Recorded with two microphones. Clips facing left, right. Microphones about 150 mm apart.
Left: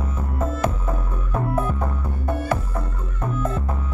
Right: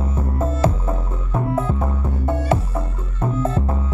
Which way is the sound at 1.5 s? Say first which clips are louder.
Right 3 dB; 25° right (ahead or behind).